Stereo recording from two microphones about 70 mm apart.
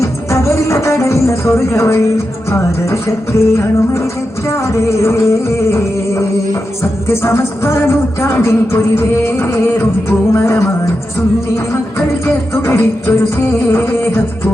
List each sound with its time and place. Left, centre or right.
0.0 s music: left